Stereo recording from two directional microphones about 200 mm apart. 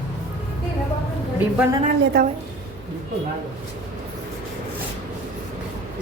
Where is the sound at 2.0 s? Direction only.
50° right (ahead or behind).